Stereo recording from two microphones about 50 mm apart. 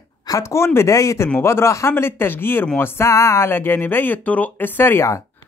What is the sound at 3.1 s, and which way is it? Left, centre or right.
Speech, left.